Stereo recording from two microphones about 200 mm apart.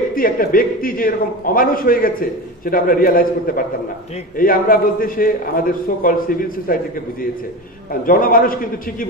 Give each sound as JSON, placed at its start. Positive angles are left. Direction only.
{"t": 0.1, "sound": "a man's voice", "side_deg": 45}
{"t": 8.1, "sound": "a man's voice", "side_deg": 45}